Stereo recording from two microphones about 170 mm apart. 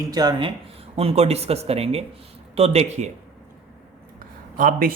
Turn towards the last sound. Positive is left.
turn(degrees=-55)  # may be behind; listen again after turning